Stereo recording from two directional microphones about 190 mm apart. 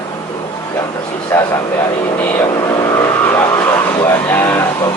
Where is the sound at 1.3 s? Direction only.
20° left (ahead or behind).